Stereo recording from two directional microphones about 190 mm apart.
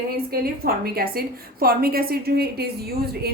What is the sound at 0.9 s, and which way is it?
Speech, 50° right (ahead or behind).